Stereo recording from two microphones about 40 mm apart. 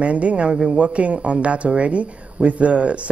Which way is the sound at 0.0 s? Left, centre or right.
Right.